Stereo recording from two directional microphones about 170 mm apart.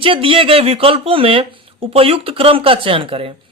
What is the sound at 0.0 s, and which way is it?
Speech, 30° right (ahead or behind).